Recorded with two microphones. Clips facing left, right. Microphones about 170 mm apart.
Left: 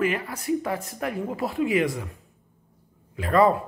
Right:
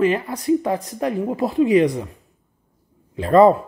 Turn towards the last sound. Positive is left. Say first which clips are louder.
# right 7 dB
turn(degrees=-25)  # may be behind; listen again after turning